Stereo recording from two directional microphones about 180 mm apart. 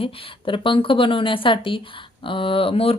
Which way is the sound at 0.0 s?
30° left (ahead or behind).